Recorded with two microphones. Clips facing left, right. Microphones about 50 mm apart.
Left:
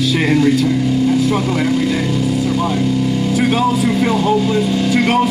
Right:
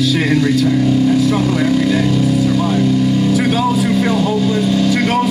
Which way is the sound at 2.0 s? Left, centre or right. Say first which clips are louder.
Right 3 dB; left.